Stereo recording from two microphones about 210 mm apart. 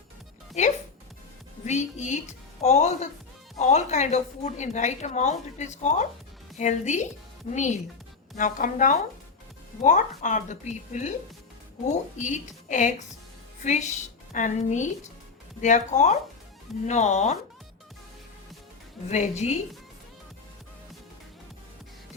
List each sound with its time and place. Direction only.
0.6 s a woman's voice: 35° left (ahead or behind)
19.4 s a woman's voice: 30° left (ahead or behind)